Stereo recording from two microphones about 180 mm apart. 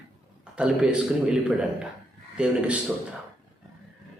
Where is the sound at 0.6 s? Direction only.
5° right (ahead or behind).